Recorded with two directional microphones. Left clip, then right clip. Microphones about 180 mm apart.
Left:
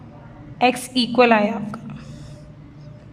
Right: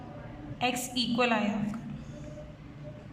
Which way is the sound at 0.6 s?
60° left (ahead or behind).